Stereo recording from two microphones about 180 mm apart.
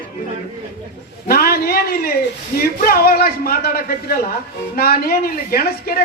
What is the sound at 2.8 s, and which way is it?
Speech, 60° left (ahead or behind).